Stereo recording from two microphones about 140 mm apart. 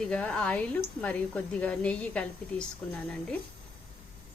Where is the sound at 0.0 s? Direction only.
5° left (ahead or behind).